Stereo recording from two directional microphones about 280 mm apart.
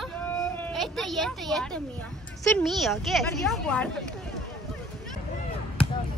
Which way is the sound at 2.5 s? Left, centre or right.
Centre.